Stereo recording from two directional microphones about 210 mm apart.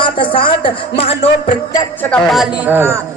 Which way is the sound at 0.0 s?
25° left (ahead or behind).